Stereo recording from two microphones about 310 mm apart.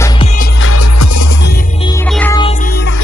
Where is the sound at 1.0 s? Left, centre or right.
Left.